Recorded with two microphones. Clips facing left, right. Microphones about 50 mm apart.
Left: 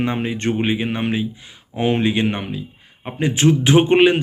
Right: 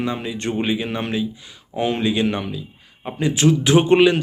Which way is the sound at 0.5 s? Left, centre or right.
Left.